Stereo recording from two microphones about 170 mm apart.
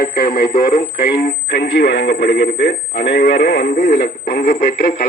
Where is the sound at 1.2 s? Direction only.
70° left (ahead or behind); by 5.0 s 50° left (ahead or behind).